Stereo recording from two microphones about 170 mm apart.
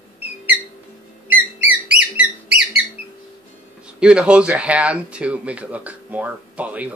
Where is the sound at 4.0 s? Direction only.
5° right (ahead or behind).